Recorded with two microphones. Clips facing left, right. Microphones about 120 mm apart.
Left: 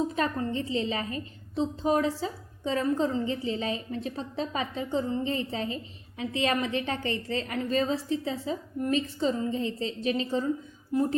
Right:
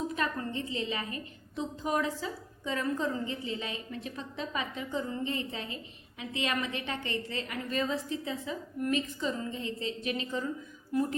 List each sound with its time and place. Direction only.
0.2 s a woman's voice: 35° left (ahead or behind)
10.9 s speech: 20° left (ahead or behind)